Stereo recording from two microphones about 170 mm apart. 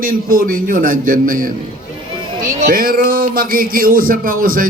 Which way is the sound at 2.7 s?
55° right (ahead or behind).